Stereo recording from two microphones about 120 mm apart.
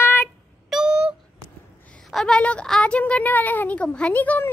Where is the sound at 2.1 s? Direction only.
5° left (ahead or behind).